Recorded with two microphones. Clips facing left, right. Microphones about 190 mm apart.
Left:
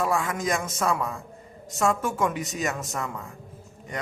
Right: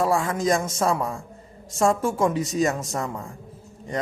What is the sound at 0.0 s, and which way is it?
A woman's voice, 30° right (ahead or behind).